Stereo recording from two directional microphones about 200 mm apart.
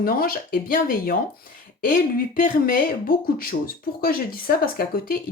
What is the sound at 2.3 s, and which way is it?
Speech, 45° left (ahead or behind).